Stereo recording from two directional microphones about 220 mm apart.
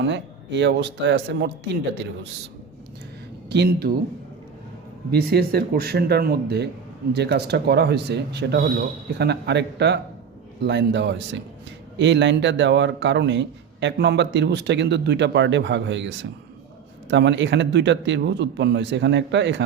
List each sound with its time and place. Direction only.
0.0 s speech: 55° right (ahead or behind)
3.5 s speech: 45° right (ahead or behind)
5.1 s speech: 45° right (ahead or behind)